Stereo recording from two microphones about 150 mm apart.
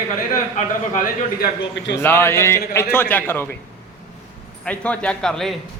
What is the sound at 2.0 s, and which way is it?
A man's voice, 15° left (ahead or behind).